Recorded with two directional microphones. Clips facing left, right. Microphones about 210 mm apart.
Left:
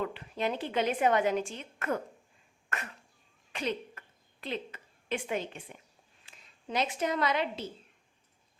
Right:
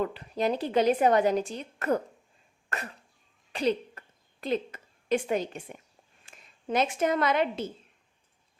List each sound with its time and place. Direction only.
0.0 s a woman's voice: 40° right (ahead or behind)
2.6 s cough: 35° right (ahead or behind)
3.5 s a sound: 35° right (ahead or behind)
6.2 s speech: 50° right (ahead or behind)